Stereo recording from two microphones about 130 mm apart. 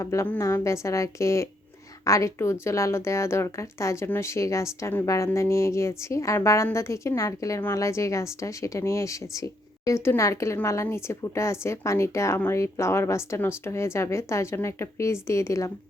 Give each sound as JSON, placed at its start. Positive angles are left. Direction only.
{"t": 0.0, "sound": "a woman's voice", "side_deg": 25}